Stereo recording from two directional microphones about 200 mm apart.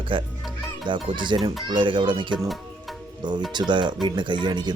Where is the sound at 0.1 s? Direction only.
25° right (ahead or behind).